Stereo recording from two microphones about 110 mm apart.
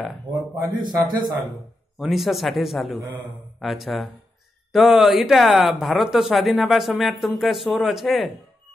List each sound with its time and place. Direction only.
0.7 s a man's voice: 40° right (ahead or behind)
2.0 s speech: centre (ahead or behind)